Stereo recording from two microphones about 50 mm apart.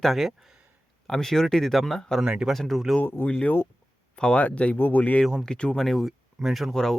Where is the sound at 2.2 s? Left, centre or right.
Centre.